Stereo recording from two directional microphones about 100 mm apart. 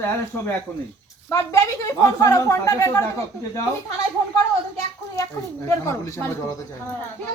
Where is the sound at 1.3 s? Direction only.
30° left (ahead or behind).